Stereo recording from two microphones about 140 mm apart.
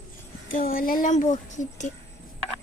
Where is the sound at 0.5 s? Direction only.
90° left; by 1.9 s 60° left (ahead or behind).